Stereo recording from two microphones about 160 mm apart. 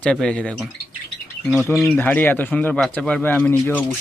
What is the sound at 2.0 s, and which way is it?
Speech, 10° left (ahead or behind).